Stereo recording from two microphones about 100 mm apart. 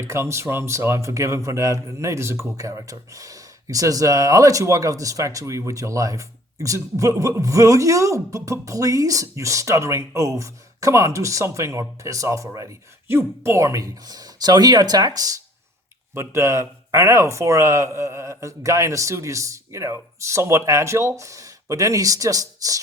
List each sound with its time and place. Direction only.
0.0 s speech: 25° right (ahead or behind)